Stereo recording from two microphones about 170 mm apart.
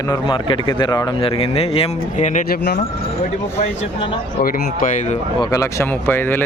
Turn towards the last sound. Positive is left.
turn(degrees=10)  # may be behind; listen again after turning